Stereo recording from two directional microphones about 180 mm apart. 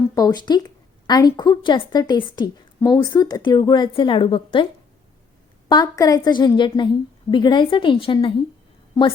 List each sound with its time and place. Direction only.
0.1 s speech: 20° left (ahead or behind)